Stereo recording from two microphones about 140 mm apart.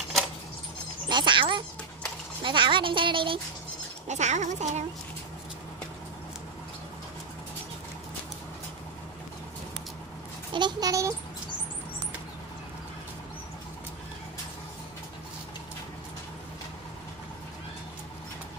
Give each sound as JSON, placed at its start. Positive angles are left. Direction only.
{"t": 1.0, "sound": "a sound", "side_deg": -35}
{"t": 2.4, "sound": "speech", "side_deg": -35}
{"t": 4.1, "sound": "speech", "side_deg": -55}
{"t": 10.5, "sound": "a child's voice", "side_deg": -30}